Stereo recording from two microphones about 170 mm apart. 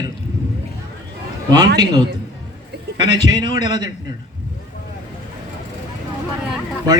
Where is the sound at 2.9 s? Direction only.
25° right (ahead or behind).